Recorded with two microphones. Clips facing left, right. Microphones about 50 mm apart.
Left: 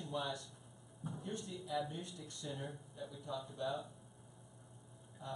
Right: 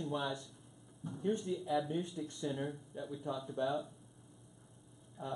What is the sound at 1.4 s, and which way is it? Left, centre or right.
Speech, centre.